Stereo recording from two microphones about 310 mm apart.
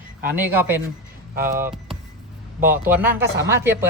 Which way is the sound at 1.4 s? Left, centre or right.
Centre.